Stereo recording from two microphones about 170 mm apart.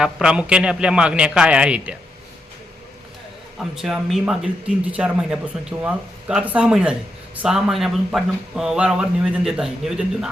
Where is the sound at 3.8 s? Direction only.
Centre (ahead or behind).